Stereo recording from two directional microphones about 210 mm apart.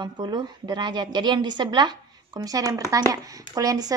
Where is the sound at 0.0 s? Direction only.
20° right (ahead or behind).